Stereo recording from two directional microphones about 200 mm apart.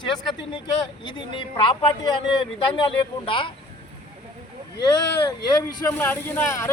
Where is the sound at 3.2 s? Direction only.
25° left (ahead or behind).